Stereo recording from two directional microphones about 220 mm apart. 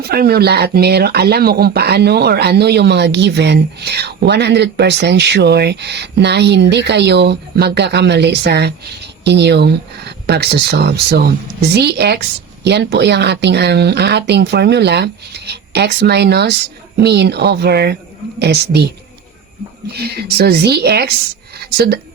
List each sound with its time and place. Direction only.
0.0 s speech: 45° right (ahead or behind)
19.9 s speech: 45° right (ahead or behind)